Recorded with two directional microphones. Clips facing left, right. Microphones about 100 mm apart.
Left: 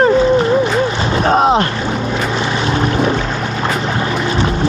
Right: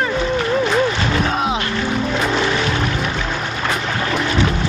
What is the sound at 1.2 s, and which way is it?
Speech, 40° left (ahead or behind).